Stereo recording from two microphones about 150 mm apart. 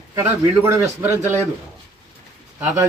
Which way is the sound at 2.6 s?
15° right (ahead or behind).